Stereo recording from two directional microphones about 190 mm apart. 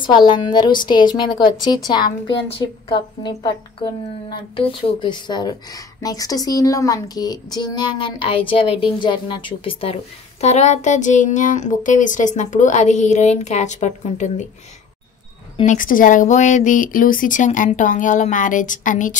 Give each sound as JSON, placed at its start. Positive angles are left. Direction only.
{"t": 0.0, "sound": "a woman's voice", "side_deg": 25}
{"t": 15.6, "sound": "speech", "side_deg": 45}